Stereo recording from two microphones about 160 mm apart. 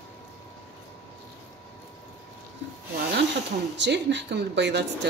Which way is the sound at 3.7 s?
90° right.